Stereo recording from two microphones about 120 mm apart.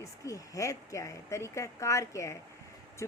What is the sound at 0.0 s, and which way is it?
Speech, 25° left (ahead or behind).